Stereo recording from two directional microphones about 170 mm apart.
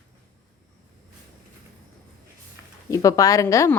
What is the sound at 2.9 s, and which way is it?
Speech, 20° left (ahead or behind).